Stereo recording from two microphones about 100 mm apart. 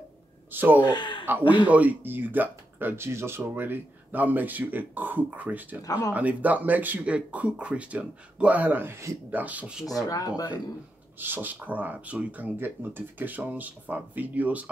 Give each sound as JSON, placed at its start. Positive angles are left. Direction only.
{"t": 0.5, "sound": "speech", "side_deg": -20}
{"t": 0.8, "sound": "speech", "side_deg": 50}
{"t": 1.7, "sound": "speech", "side_deg": -15}
{"t": 5.8, "sound": "speech", "side_deg": 35}
{"t": 6.1, "sound": "speech", "side_deg": -15}
{"t": 9.9, "sound": "speech", "side_deg": 35}
{"t": 11.1, "sound": "speech", "side_deg": -20}